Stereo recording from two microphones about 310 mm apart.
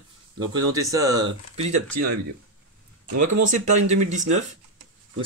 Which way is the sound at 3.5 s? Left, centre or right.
Right.